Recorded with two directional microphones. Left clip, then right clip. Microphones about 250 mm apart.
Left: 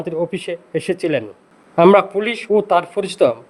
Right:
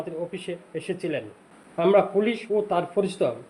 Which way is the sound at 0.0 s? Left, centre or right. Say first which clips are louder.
Left 10 dB; left.